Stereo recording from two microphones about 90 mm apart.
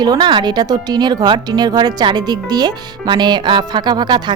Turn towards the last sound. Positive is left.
turn(degrees=-55)  # may be behind; listen again after turning